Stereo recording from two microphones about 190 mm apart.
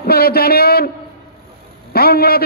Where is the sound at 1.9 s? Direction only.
55° left (ahead or behind).